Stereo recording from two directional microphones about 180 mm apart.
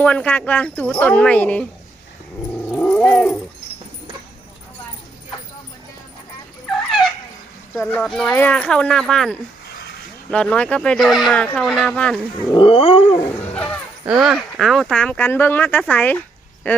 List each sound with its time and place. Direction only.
0.0 s speech: 10° left (ahead or behind)
2.7 s cat: 5° left (ahead or behind)
7.8 s speech: 5° left (ahead or behind)
12.5 s cat: 30° left (ahead or behind)
13.2 s music: 10° left (ahead or behind)
14.2 s speech: centre (ahead or behind)